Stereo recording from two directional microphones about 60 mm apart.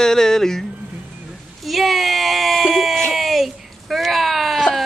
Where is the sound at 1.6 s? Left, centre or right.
Centre.